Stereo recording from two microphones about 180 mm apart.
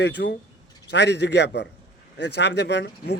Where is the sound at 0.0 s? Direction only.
75° left (ahead or behind).